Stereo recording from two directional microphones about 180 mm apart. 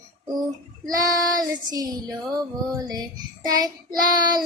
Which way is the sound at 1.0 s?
20° right (ahead or behind).